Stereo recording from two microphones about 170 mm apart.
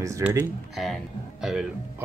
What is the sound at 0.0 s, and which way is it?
Speech, 15° right (ahead or behind).